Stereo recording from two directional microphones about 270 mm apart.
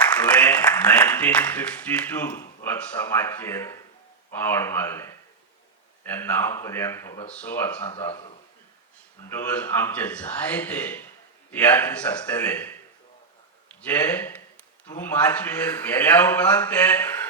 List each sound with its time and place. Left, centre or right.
0.1 s speech: centre
9.3 s speech: centre
13.8 s speech: centre